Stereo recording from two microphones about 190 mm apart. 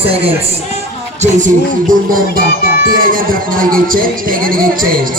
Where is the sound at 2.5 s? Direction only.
50° left (ahead or behind).